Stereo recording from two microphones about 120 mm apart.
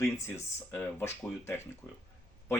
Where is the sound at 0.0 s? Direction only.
20° left (ahead or behind).